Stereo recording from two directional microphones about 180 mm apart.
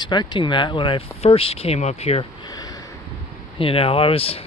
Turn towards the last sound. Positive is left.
turn(degrees=30)  # may be behind; listen again after turning